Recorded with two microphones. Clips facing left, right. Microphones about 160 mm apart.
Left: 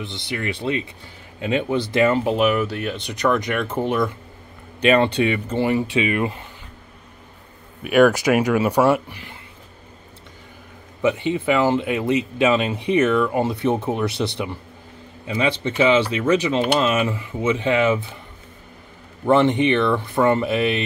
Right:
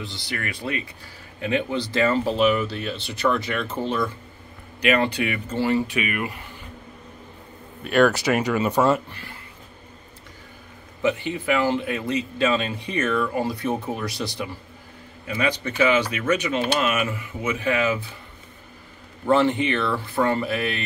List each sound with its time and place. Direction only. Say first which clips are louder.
0.0 s speech: left 4 dB; 25° left (ahead or behind)
7.8 s speech: left 4 dB; 10° left (ahead or behind)
11.0 s speech: left 3 dB; 20° left (ahead or behind)
12.9 s speech: left 6 dB; 85° left
14.1 s speech: left 5 dB; 25° left (ahead or behind)
19.2 s speech: left 3 dB; 20° left (ahead or behind)